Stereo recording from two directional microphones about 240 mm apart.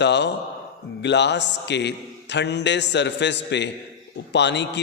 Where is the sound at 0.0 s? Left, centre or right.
Left.